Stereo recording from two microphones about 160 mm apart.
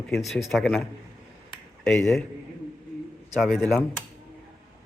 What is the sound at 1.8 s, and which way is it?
Speech, centre (ahead or behind).